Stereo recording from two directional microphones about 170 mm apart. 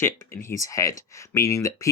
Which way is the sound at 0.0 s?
15° left (ahead or behind).